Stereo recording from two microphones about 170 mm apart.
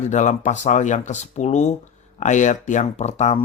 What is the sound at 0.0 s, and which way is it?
Speech, 45° left (ahead or behind).